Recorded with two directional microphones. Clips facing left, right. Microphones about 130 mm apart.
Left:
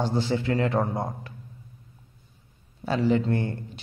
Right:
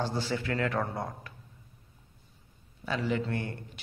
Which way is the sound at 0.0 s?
20° left (ahead or behind).